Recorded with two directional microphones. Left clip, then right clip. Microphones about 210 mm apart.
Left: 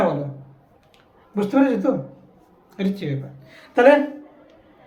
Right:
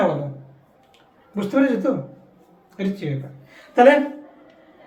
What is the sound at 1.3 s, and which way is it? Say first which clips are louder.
Speech: left 1 dB; 20° left (ahead or behind).